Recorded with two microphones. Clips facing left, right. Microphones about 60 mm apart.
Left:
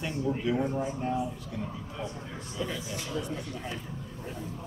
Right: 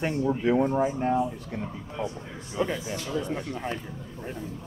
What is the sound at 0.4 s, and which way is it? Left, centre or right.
Speech, right.